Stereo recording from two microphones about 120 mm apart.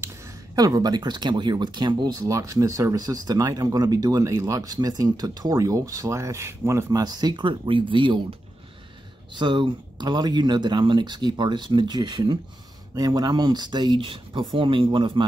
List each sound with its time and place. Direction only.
0.6 s speech: 30° right (ahead or behind)